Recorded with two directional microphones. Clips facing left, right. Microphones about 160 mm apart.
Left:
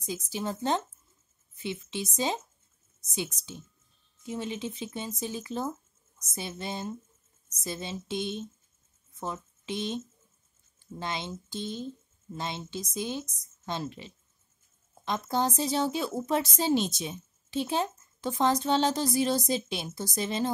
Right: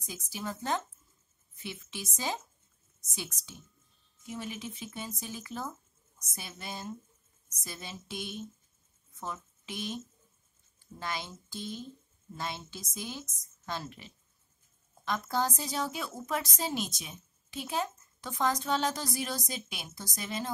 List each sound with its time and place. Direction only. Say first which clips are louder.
0.0 s a woman's voice: left 6 dB; 25° left (ahead or behind)